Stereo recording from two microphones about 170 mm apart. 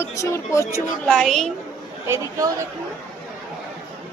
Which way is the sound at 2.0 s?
15° right (ahead or behind).